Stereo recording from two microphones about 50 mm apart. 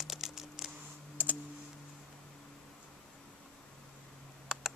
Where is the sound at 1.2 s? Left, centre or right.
Right.